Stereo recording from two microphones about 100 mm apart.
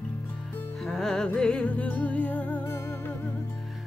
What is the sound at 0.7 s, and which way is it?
Music, 5° left (ahead or behind).